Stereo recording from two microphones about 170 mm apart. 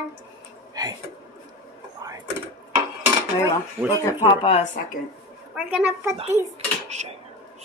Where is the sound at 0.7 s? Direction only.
20° right (ahead or behind).